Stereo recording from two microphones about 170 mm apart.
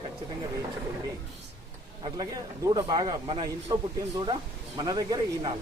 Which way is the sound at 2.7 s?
25° right (ahead or behind).